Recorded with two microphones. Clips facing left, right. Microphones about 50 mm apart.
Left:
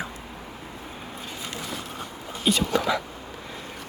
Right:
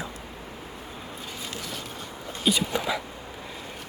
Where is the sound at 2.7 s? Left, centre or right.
Centre.